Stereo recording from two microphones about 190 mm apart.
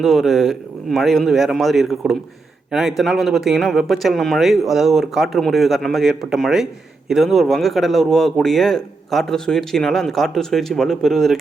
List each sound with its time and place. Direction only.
0.0 s speech: centre (ahead or behind)